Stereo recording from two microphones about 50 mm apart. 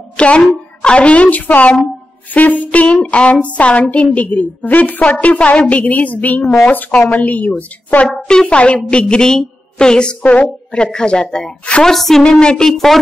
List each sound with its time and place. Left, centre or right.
0.2 s a woman's voice: left
8.3 s a woman's voice: centre
9.0 s a woman's voice: centre
11.8 s a woman's voice: centre
12.3 s a woman's voice: centre
12.7 s speech: centre